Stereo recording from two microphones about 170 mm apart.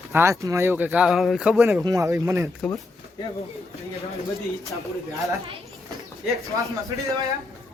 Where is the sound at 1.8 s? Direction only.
20° right (ahead or behind).